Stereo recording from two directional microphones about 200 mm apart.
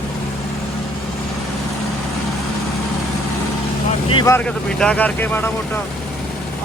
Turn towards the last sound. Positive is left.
turn(degrees=10)  # may be behind; listen again after turning